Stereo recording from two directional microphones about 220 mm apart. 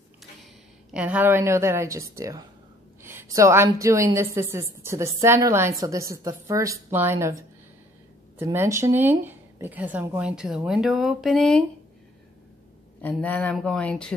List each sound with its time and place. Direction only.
0.9 s a woman's voice: 5° right (ahead or behind)
8.4 s a woman's voice: 15° right (ahead or behind); by 11.6 s 5° left (ahead or behind)
13.0 s a woman's voice: 5° left (ahead or behind)